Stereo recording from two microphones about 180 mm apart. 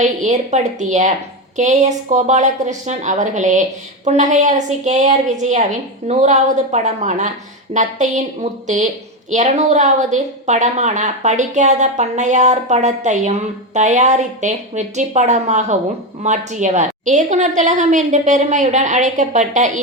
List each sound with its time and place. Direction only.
0.0 s a woman's voice: 40° right (ahead or behind)